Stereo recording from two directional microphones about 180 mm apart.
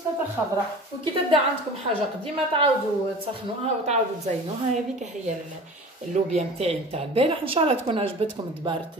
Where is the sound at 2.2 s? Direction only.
30° right (ahead or behind).